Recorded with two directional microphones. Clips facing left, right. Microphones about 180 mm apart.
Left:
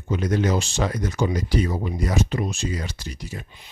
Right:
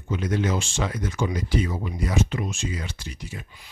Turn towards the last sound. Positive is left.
turn(degrees=40)  # may be behind; listen again after turning